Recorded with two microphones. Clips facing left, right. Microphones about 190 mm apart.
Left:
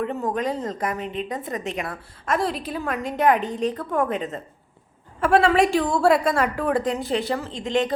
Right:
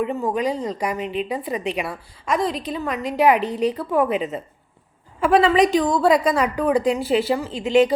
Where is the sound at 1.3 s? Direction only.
10° right (ahead or behind).